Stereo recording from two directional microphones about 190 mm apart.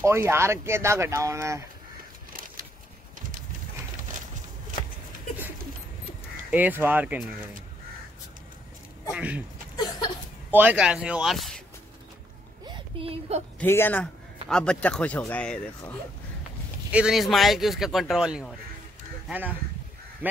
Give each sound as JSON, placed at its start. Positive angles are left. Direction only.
{"t": 0.0, "sound": "speech", "side_deg": -15}
{"t": 6.5, "sound": "speech", "side_deg": -10}
{"t": 9.1, "sound": "speech", "side_deg": -5}
{"t": 9.8, "sound": "a sound", "side_deg": 20}
{"t": 10.5, "sound": "speech", "side_deg": -10}
{"t": 12.6, "sound": "a sound", "side_deg": -25}
{"t": 13.6, "sound": "speech", "side_deg": 10}